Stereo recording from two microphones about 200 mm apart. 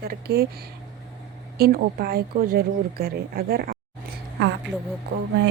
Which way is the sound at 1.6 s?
50° right (ahead or behind).